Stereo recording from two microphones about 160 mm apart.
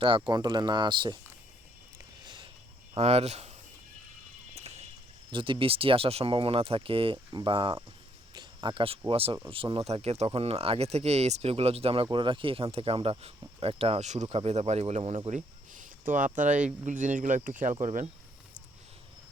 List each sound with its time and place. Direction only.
0.0 s speech: 30° right (ahead or behind)
2.2 s a sound: 30° right (ahead or behind)
2.9 s speech: 40° right (ahead or behind)
4.5 s a sound: 40° right (ahead or behind)
5.3 s speech: 30° right (ahead or behind)
8.3 s cricket: 30° right (ahead or behind)
9.0 s speech: 35° right (ahead or behind); by 18.1 s 50° right (ahead or behind)